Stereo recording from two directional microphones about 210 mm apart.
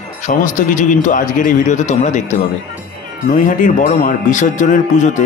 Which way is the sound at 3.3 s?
40° left (ahead or behind).